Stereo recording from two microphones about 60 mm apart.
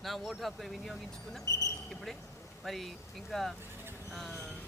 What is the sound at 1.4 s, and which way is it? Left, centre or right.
Speech, left.